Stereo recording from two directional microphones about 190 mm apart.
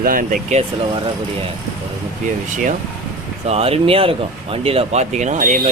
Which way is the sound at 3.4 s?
30° right (ahead or behind).